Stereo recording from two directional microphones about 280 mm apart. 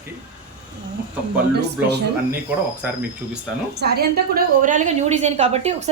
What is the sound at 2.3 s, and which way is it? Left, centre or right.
Speech, centre.